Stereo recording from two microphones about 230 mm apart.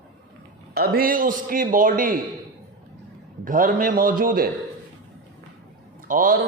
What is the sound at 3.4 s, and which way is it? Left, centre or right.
A man's voice, right.